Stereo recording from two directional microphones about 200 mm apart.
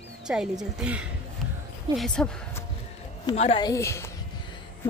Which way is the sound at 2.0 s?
5° left (ahead or behind).